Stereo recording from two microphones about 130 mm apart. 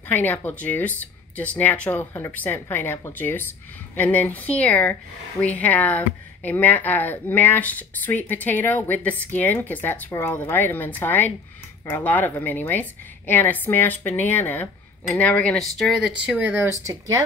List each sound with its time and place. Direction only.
0.1 s speech: 15° left (ahead or behind); by 16.3 s 5° right (ahead or behind)
16.3 s speech: 15° right (ahead or behind)